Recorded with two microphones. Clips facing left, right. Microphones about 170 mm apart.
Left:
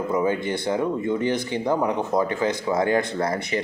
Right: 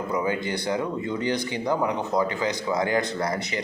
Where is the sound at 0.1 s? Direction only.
25° left (ahead or behind).